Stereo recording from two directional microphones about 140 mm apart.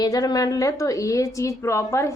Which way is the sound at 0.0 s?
25° left (ahead or behind).